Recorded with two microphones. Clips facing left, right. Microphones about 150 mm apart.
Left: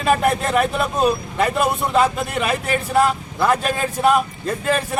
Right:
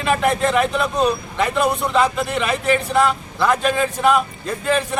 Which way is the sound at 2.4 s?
40° left (ahead or behind).